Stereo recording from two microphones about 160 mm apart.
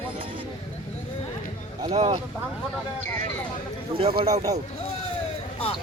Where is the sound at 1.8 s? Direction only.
40° right (ahead or behind).